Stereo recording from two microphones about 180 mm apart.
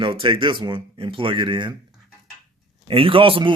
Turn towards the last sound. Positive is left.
turn(degrees=-30)  # may be behind; listen again after turning